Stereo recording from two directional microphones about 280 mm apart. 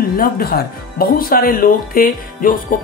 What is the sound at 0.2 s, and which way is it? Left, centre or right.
Speech, left.